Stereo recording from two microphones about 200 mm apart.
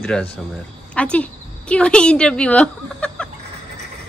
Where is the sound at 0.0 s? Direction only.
5° left (ahead or behind).